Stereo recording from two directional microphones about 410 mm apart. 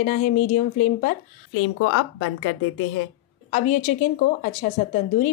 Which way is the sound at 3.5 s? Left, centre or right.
Centre.